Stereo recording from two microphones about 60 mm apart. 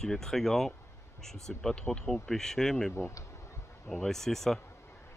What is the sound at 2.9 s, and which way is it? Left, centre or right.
Bee, left.